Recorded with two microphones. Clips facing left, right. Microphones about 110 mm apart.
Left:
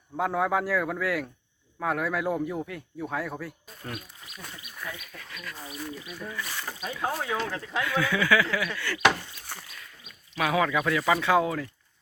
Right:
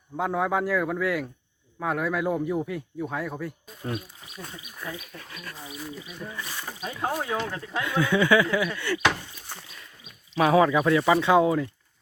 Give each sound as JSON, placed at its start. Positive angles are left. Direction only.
{"t": 0.2, "sound": "speech", "side_deg": 0}
{"t": 3.8, "sound": "speech", "side_deg": -20}
{"t": 4.9, "sound": "speech", "side_deg": -30}
{"t": 5.5, "sound": "speech", "side_deg": -5}
{"t": 6.0, "sound": "speech", "side_deg": -20}
{"t": 6.9, "sound": "speech", "side_deg": -10}
{"t": 7.6, "sound": "speech", "side_deg": -25}
{"t": 9.0, "sound": "speech", "side_deg": 5}
{"t": 10.3, "sound": "speech", "side_deg": -30}